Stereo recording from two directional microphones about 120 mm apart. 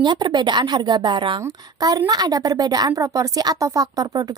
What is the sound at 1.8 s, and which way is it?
A woman's voice, 30° right (ahead or behind).